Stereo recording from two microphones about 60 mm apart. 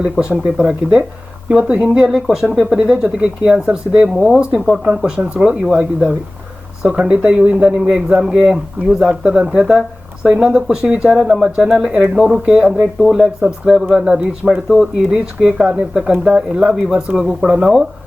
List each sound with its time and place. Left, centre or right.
0.0 s speech: centre
4.1 s speech: centre
13.0 s speech: centre